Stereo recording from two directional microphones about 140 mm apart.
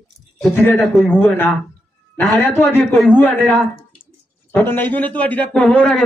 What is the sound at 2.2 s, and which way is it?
Speech, 15° left (ahead or behind).